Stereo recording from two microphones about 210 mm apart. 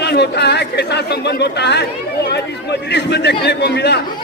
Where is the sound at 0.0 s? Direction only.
50° left (ahead or behind).